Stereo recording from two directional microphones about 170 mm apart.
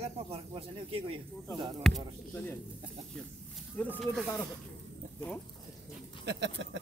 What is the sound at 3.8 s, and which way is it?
Speech, 5° left (ahead or behind).